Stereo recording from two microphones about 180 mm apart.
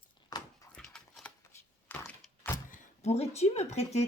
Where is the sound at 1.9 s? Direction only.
10° left (ahead or behind).